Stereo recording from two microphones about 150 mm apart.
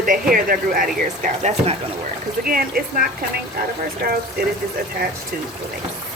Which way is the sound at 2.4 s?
75° right (ahead or behind).